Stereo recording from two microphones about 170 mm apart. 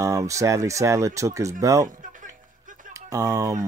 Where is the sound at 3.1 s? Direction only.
20° right (ahead or behind).